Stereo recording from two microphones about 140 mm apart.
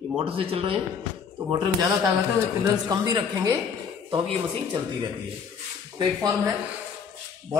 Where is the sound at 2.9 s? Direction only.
30° right (ahead or behind).